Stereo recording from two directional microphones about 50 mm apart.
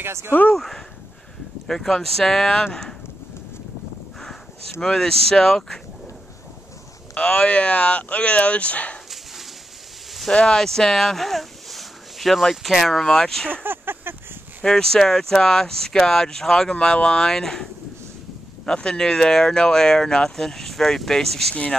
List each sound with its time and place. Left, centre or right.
0.0 s speech: right
0.3 s speech: left
0.6 s speech: centre
4.8 s speech: centre
7.2 s speech: left
10.3 s speech: centre
13.7 s a sound: right
14.6 s speech: centre
18.8 s speech: centre